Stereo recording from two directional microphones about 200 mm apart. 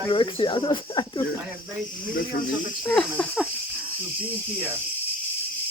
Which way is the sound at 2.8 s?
5° left (ahead or behind).